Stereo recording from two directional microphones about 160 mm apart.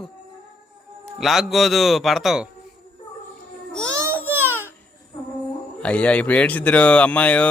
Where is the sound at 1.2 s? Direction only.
Centre (ahead or behind).